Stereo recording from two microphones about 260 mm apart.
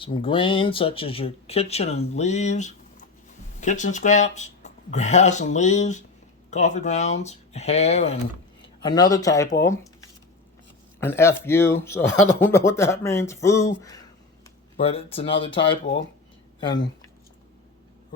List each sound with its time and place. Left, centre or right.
0.0 s speech: centre
11.0 s speech: centre